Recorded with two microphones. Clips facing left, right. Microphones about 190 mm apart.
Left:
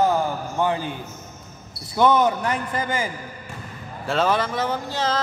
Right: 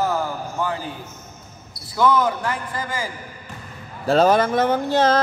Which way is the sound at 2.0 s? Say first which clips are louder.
Left 1 dB; 20° left (ahead or behind).